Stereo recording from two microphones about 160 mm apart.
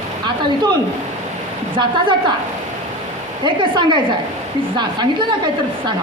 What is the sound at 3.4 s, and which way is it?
A woman's voice, 30° right (ahead or behind).